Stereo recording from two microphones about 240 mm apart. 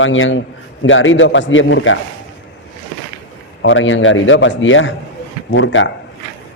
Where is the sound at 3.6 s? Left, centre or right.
Left.